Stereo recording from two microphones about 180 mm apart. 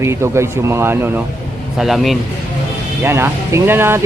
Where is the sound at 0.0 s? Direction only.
15° right (ahead or behind).